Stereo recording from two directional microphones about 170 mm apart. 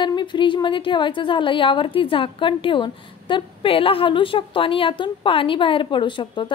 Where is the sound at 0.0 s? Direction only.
25° left (ahead or behind).